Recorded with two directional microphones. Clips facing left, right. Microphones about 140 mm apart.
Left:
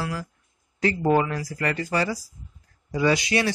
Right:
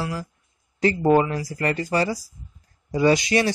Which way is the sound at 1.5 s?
30° right (ahead or behind).